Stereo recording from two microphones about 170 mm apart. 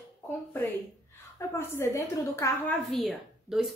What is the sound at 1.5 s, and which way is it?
A woman's voice, 15° left (ahead or behind).